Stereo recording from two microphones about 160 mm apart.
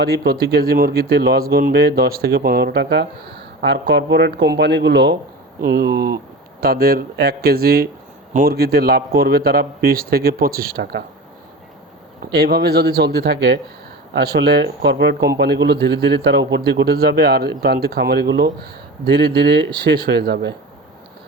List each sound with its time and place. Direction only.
0.0 s a man's voice: 80° right
5.6 s speech: 70° right (ahead or behind)
12.2 s a man's voice: 85° right